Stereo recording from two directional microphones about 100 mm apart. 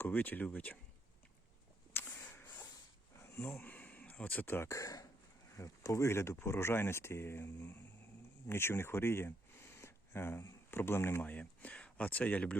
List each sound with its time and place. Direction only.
0.0 s speech: 20° left (ahead or behind)
1.9 s a sound: 20° left (ahead or behind)
5.5 s speech: 30° left (ahead or behind); by 12.5 s 15° left (ahead or behind)